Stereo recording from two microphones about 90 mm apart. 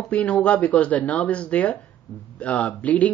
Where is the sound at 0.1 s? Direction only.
15° left (ahead or behind).